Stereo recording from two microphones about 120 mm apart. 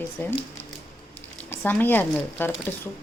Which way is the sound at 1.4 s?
20° left (ahead or behind).